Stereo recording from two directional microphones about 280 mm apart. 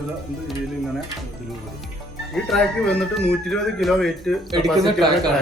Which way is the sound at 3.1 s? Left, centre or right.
Centre.